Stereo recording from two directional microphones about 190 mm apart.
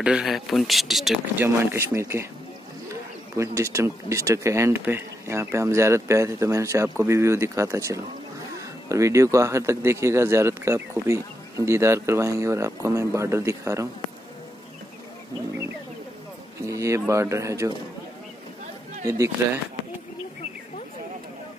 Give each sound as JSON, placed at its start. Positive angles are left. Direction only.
{"t": 0.0, "sound": "speech", "side_deg": -5}
{"t": 1.4, "sound": "speech", "side_deg": -15}
{"t": 3.3, "sound": "speech", "side_deg": -15}
{"t": 16.6, "sound": "speech", "side_deg": -15}
{"t": 19.0, "sound": "speech", "side_deg": -15}